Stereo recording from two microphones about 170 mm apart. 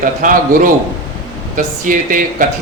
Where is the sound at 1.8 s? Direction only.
50° right (ahead or behind).